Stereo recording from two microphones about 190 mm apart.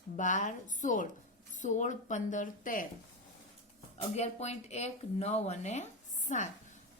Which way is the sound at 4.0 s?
35° left (ahead or behind).